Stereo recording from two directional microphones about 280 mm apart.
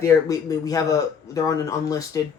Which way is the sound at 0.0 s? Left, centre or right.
Centre.